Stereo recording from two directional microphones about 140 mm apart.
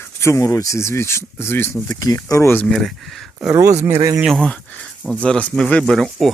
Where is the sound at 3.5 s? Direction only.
25° right (ahead or behind).